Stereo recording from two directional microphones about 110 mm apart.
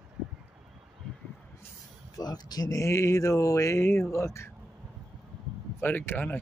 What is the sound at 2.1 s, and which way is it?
Speech, 40° left (ahead or behind).